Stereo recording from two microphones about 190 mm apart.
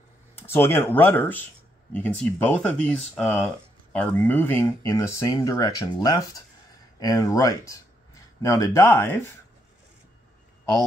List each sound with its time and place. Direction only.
0.4 s speech: 10° left (ahead or behind)